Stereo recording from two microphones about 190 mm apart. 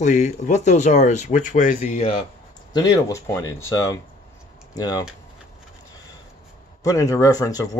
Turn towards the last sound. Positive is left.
turn(degrees=20)  # may be behind; listen again after turning